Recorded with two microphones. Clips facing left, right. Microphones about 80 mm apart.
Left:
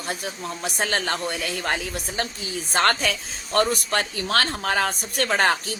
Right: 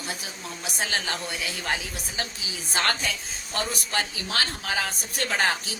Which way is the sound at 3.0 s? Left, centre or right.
Left.